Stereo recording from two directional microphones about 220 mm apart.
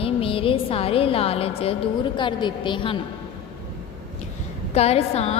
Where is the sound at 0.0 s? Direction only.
25° left (ahead or behind).